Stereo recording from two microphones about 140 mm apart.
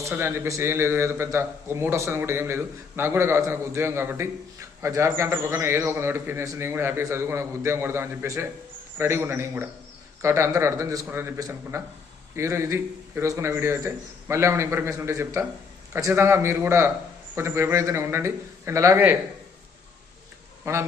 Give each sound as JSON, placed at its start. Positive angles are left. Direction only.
{"t": 0.0, "sound": "a man's voice", "side_deg": -15}
{"t": 20.7, "sound": "a man's voice", "side_deg": -20}